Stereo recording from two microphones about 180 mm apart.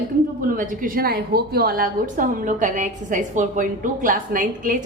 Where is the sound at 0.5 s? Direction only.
50° right (ahead or behind).